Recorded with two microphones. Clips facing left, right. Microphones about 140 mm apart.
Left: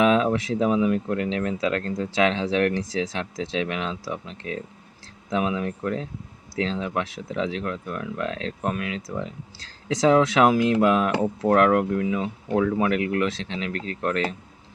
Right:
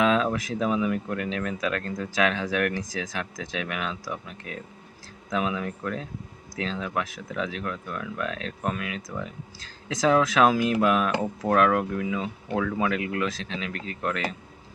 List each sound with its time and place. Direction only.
0.0 s speech: 25° left (ahead or behind)